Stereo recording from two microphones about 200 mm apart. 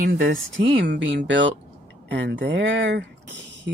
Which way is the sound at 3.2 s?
65° right (ahead or behind).